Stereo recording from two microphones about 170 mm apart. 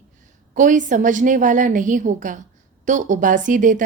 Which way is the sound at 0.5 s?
50° right (ahead or behind).